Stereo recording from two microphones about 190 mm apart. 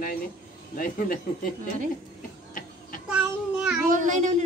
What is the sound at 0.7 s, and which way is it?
Speech, 45° left (ahead or behind).